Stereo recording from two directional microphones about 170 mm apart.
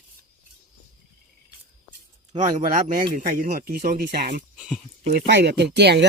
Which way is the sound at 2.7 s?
55° right (ahead or behind).